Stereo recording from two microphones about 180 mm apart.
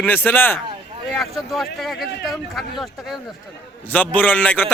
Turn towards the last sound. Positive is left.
turn(degrees=10)  # may be behind; listen again after turning